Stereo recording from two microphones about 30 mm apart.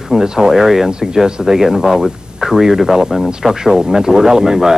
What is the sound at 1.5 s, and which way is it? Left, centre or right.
Speech, centre.